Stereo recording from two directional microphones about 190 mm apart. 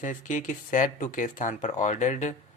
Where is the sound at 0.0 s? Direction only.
40° left (ahead or behind).